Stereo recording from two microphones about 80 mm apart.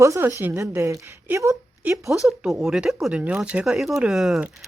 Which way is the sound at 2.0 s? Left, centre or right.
Centre.